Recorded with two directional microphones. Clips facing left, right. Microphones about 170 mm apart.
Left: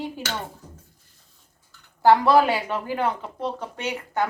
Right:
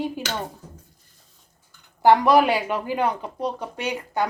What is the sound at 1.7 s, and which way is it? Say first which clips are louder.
Speech: right 1 dB; 15° right (ahead or behind).